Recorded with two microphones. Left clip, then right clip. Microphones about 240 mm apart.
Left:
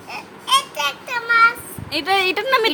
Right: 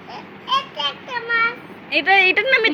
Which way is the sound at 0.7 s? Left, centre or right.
Left.